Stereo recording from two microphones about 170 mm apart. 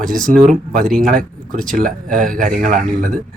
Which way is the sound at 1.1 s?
55° right (ahead or behind).